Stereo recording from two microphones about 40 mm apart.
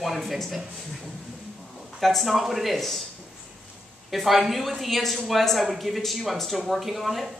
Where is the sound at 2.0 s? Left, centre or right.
Centre.